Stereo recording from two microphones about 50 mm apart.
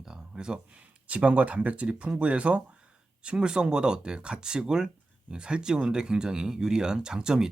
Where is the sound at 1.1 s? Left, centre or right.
Right.